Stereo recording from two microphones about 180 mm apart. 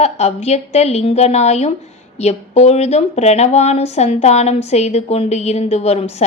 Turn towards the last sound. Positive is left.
turn(degrees=35)  # may be behind; listen again after turning